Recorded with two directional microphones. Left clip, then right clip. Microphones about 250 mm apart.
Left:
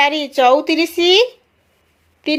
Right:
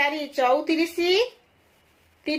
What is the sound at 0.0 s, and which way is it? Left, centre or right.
A woman's voice, left.